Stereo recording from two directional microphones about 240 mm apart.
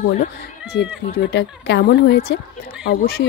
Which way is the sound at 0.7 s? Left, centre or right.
Left.